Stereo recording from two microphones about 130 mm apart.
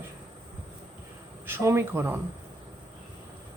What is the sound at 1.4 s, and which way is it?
Speech, 20° right (ahead or behind).